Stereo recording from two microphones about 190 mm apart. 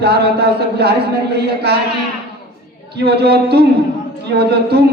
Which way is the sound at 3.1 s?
60° right (ahead or behind).